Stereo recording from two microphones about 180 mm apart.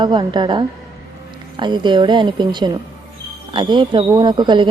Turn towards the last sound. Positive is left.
turn(degrees=-25)  # may be behind; listen again after turning